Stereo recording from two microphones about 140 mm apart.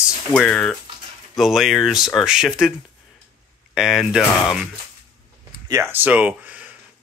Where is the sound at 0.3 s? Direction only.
5° left (ahead or behind).